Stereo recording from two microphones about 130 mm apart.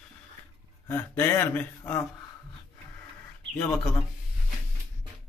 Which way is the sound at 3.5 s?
5° left (ahead or behind).